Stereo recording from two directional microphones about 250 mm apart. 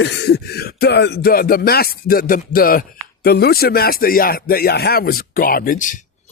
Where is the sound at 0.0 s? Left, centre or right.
Left.